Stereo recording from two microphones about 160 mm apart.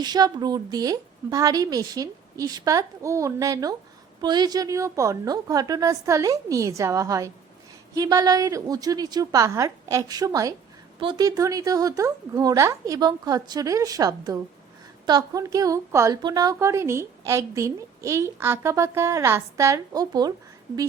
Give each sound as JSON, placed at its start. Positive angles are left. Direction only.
{"t": 0.0, "sound": "a woman's voice", "side_deg": -25}